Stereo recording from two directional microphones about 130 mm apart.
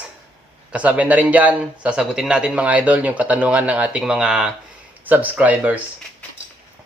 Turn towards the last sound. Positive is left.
turn(degrees=-10)  # may be behind; listen again after turning